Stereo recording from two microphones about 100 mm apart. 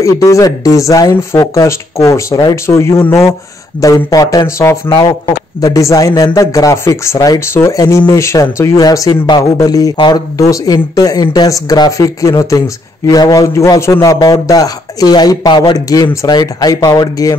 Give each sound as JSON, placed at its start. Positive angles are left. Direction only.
{"t": 0.0, "sound": "speech", "side_deg": 35}
{"t": 1.7, "sound": "speech", "side_deg": 30}
{"t": 3.8, "sound": "speech", "side_deg": 35}
{"t": 14.2, "sound": "speech", "side_deg": 40}
{"t": 15.9, "sound": "speech", "side_deg": 35}